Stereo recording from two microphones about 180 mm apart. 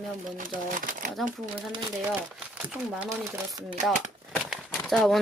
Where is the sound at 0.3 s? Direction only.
45° right (ahead or behind).